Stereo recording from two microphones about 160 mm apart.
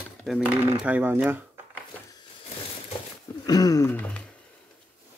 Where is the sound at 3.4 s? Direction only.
25° left (ahead or behind).